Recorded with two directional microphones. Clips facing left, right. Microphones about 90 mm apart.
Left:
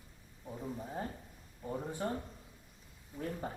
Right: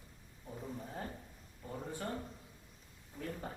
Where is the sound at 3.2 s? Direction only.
25° left (ahead or behind).